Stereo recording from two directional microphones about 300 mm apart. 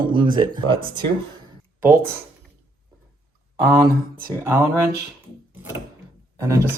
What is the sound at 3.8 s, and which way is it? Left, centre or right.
Speech, right.